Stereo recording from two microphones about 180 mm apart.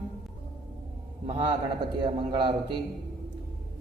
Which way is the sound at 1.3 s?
30° right (ahead or behind).